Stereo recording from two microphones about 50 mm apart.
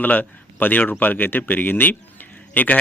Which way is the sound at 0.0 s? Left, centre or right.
Left.